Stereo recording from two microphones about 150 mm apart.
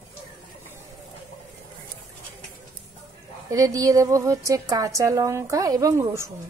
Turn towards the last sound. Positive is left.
turn(degrees=-20)  # may be behind; listen again after turning